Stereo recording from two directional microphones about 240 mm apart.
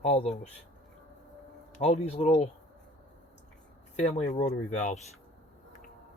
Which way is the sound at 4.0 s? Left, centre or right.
Left.